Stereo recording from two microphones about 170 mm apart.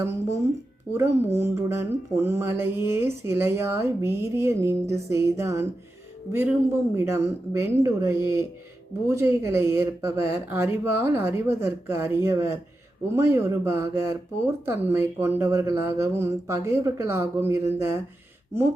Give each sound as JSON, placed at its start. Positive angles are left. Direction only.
{"t": 0.0, "sound": "speech", "side_deg": -15}
{"t": 6.9, "sound": "speech", "side_deg": -15}